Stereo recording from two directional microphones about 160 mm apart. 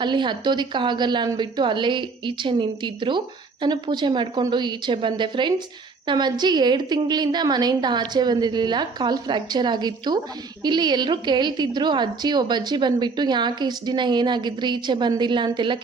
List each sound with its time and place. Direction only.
0.0 s a woman's voice: 30° right (ahead or behind)